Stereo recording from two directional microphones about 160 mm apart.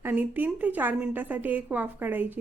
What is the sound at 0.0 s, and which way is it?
A woman's voice, 10° right (ahead or behind).